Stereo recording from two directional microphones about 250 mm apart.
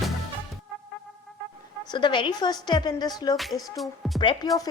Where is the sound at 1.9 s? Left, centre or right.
Centre.